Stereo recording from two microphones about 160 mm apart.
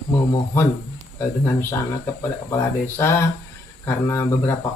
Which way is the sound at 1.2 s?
20° left (ahead or behind).